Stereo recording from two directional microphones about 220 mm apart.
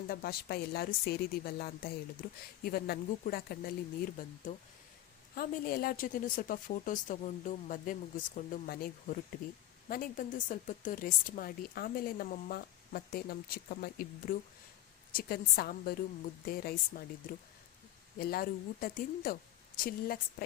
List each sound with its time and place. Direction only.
0.1 s speech: 45° left (ahead or behind)